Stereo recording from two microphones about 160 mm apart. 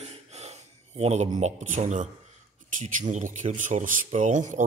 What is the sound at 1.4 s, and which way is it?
Speech, 50° right (ahead or behind).